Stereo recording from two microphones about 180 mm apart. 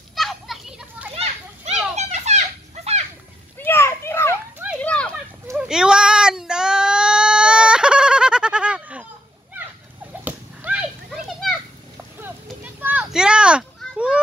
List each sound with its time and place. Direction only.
0.1 s children playing: centre (ahead or behind)
1.1 s children playing: 35° right (ahead or behind)
3.5 s children playing: 10° left (ahead or behind)
4.8 s a sound: 5° left (ahead or behind)
5.6 s child singing: 5° right (ahead or behind)
10.2 s children playing: 10° right (ahead or behind)
12.8 s a sound: 5° right (ahead or behind)